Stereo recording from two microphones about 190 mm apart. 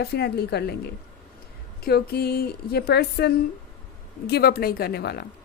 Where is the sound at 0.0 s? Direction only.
60° left (ahead or behind).